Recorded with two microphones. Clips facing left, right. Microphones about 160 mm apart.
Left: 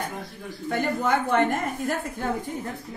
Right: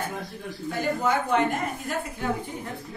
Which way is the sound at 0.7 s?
60° left (ahead or behind).